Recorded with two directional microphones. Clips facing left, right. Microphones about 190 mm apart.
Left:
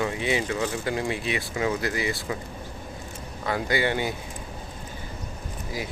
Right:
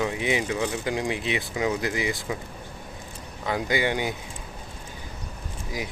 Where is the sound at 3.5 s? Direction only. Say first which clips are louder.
Even; 15° right (ahead or behind).